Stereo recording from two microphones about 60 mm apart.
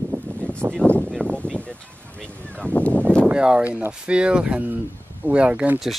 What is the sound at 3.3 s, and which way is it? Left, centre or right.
Speech, centre.